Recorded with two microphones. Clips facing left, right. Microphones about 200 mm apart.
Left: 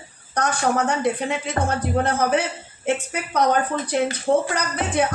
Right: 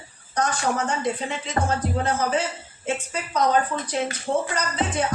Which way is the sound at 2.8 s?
65° left (ahead or behind).